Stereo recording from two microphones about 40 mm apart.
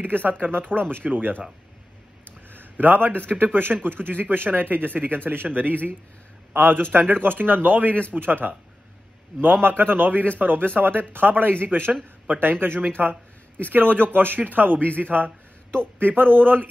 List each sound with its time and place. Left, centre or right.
0.0 s a man's voice: right
2.5 s a man's voice: right
9.6 s a man's voice: right